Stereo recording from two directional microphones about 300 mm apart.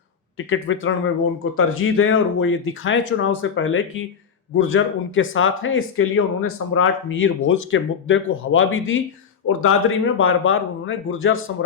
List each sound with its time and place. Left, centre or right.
0.3 s speech: left